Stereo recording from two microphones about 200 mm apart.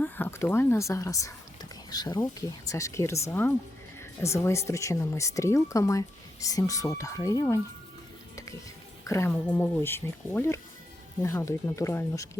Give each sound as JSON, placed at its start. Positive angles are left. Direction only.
{"t": 0.0, "sound": "speech", "side_deg": 10}
{"t": 9.0, "sound": "speech", "side_deg": 15}